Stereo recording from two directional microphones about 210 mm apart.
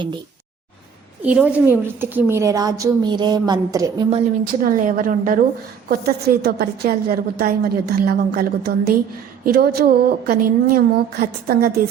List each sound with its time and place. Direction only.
1.2 s a woman's voice: 5° right (ahead or behind)
4.6 s a woman's voice: 40° right (ahead or behind)